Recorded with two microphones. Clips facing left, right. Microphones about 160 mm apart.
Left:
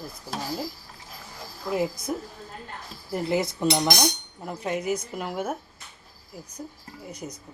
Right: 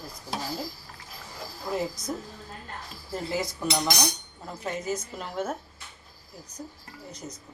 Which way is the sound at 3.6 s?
20° left (ahead or behind).